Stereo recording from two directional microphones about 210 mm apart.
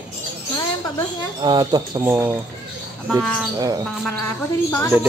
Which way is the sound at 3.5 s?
15° right (ahead or behind).